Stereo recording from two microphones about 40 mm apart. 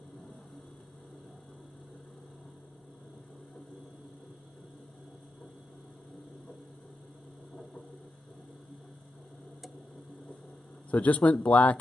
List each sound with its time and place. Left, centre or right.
10.9 s speech: left